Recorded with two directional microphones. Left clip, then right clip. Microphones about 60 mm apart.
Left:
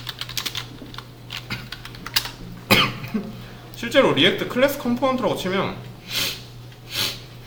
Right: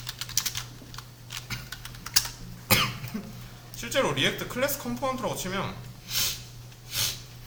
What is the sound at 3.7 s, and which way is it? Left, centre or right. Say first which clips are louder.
Speech: left 9 dB; centre.